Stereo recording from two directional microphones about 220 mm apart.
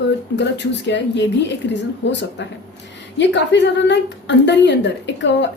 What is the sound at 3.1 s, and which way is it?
A woman's voice, 55° left (ahead or behind).